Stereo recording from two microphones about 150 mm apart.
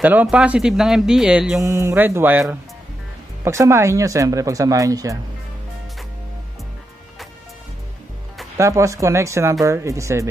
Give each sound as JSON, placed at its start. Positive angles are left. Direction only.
{"t": 0.0, "sound": "speech", "side_deg": -10}
{"t": 1.6, "sound": "speech", "side_deg": -20}
{"t": 3.4, "sound": "speech", "side_deg": -20}
{"t": 8.5, "sound": "speech", "side_deg": -20}